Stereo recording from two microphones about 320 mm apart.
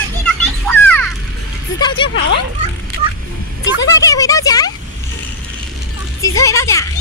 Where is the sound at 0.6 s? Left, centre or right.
Centre.